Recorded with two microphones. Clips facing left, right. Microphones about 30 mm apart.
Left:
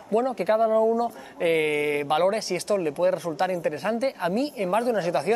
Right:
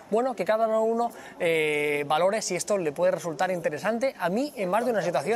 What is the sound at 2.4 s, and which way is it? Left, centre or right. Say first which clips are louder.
Speech: left 2 dB; left.